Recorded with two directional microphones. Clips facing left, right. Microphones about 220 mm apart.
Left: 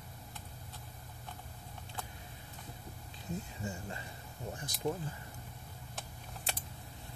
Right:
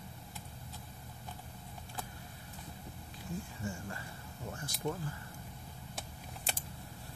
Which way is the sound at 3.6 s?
20° left (ahead or behind).